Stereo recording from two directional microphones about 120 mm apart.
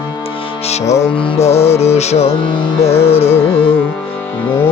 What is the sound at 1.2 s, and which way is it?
Music, 60° left (ahead or behind).